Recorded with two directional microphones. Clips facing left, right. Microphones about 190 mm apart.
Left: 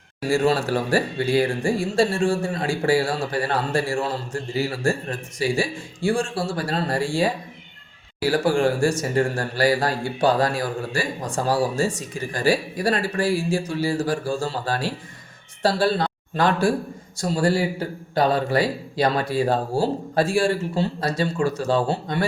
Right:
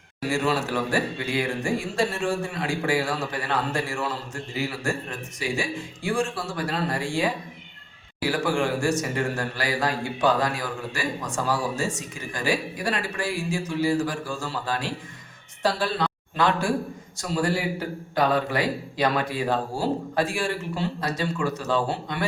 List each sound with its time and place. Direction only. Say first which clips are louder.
0.3 s a man's voice: left 5 dB; 35° left (ahead or behind)